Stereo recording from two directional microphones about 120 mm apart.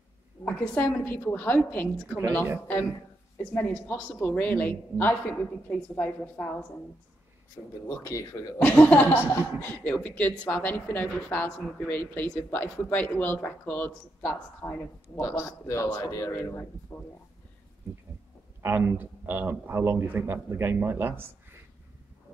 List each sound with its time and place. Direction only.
0.5 s speech: 15° left (ahead or behind)
3.5 s speech: 15° left (ahead or behind)
7.8 s speech: 25° left (ahead or behind)
8.5 s speech: 10° left (ahead or behind)
18.6 s a man's voice: 20° right (ahead or behind)